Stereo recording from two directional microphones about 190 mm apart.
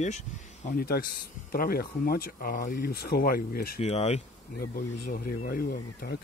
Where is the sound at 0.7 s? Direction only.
50° left (ahead or behind).